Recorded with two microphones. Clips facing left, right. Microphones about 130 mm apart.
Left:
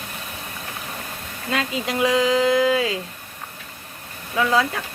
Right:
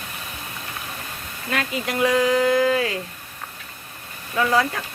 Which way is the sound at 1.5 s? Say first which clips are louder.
Left 1 dB; 20° left (ahead or behind).